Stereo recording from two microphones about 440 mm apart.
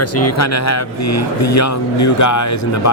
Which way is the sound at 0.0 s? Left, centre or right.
Left.